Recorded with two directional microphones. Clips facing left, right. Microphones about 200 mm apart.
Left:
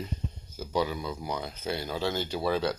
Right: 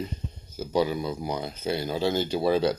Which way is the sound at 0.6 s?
30° right (ahead or behind).